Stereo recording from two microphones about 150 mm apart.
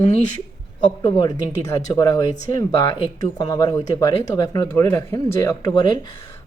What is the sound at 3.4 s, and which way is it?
Speech, 25° left (ahead or behind).